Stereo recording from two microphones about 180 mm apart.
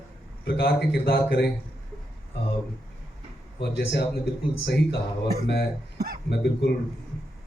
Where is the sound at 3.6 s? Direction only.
65° left (ahead or behind).